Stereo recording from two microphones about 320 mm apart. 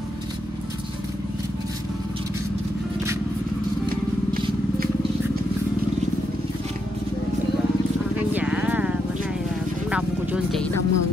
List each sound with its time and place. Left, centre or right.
3.9 s vehicle: right
8.3 s vehicle: centre
9.8 s music: centre
10.7 s vehicle: left